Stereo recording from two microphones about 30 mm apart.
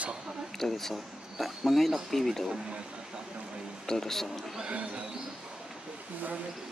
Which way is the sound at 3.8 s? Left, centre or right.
Centre.